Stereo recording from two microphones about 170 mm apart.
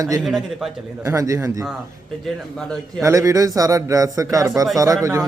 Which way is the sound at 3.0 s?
20° right (ahead or behind).